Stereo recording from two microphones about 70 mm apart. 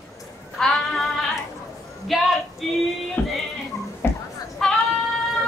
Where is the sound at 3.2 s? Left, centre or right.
Left.